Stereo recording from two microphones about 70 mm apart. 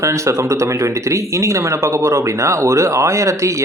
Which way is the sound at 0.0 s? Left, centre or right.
Right.